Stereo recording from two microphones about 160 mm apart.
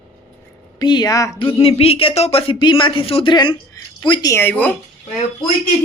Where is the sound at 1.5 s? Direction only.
40° left (ahead or behind); by 4.7 s 10° left (ahead or behind).